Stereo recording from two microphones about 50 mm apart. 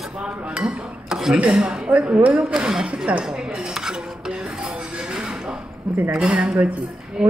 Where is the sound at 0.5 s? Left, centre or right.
Centre.